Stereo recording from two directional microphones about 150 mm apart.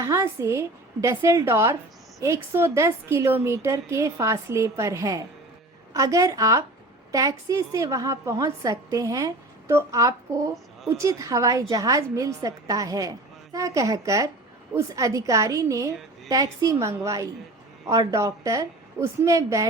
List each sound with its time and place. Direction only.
0.0 s a woman's voice: 20° right (ahead or behind)